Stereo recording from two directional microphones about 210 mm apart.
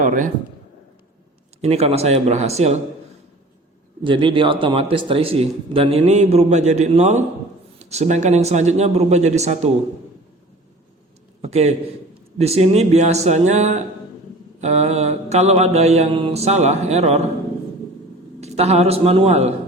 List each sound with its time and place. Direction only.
0.0 s a sound: 40° right (ahead or behind)
1.6 s mantra: 30° right (ahead or behind)
4.0 s a man's voice: 25° right (ahead or behind)
7.9 s mantra: 30° right (ahead or behind)
11.4 s mantra: 30° right (ahead or behind)
18.3 s a man's voice: 30° right (ahead or behind)